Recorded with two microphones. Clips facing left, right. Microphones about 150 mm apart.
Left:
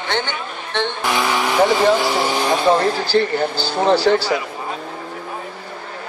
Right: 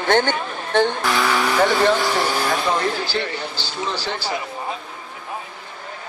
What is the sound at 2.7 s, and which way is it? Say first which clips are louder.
Speech: left 6 dB; 40° left (ahead or behind).